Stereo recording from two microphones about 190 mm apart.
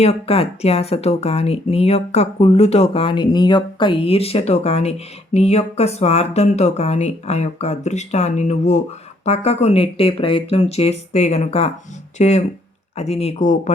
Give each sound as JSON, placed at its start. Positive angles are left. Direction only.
{"t": 0.0, "sound": "speech", "side_deg": 30}